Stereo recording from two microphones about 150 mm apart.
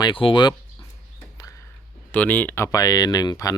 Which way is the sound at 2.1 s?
10° left (ahead or behind).